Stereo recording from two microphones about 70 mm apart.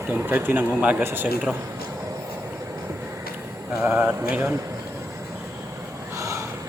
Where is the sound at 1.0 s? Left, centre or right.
Right.